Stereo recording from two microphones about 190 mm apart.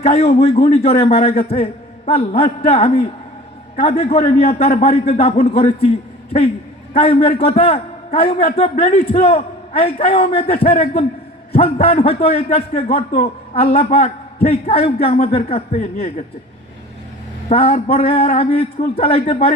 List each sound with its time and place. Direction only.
0.0 s a man's voice: 35° left (ahead or behind)
6.9 s a man's voice: 30° left (ahead or behind)
15.8 s speech: 45° left (ahead or behind)
17.5 s a man's voice: 30° left (ahead or behind)